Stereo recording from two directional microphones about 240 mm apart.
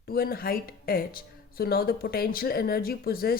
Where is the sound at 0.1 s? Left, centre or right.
Left.